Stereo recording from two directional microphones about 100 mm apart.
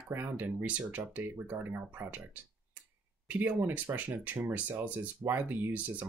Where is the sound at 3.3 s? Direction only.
20° right (ahead or behind).